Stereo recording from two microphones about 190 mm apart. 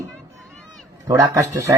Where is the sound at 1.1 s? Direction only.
15° right (ahead or behind).